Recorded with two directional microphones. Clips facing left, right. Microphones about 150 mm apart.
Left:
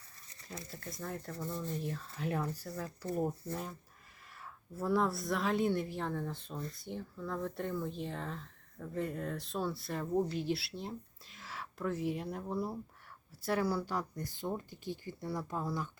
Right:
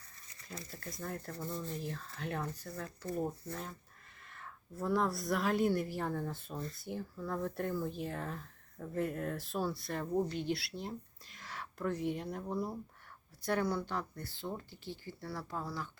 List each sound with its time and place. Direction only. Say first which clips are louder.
0.5 s speech: left 1 dB; centre (ahead or behind); by 15.9 s 20° left (ahead or behind)